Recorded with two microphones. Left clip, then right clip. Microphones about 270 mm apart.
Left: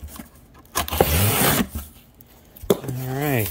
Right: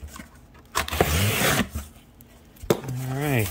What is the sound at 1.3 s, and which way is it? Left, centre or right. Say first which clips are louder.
Printer: left 2 dB; left.